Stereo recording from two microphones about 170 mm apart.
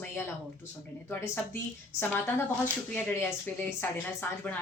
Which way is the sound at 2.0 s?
15° left (ahead or behind).